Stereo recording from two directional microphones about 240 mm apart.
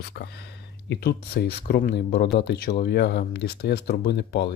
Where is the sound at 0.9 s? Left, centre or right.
Left.